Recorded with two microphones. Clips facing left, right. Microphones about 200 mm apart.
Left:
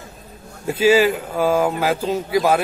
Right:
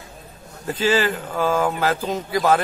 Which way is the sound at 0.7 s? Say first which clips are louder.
Left 5 dB; 10° left (ahead or behind).